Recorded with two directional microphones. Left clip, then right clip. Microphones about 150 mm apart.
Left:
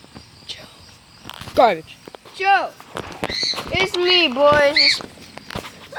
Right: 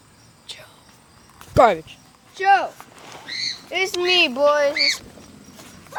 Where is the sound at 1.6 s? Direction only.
Centre (ahead or behind).